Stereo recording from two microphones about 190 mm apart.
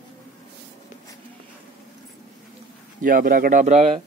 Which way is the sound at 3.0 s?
50° right (ahead or behind).